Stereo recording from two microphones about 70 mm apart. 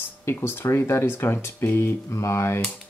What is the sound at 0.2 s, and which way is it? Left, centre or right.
Speech, left.